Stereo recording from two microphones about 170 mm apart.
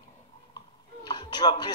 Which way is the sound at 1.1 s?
25° left (ahead or behind).